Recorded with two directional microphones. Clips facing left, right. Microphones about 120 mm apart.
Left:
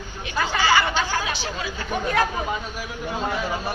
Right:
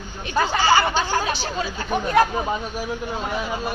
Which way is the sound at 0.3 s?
35° right (ahead or behind).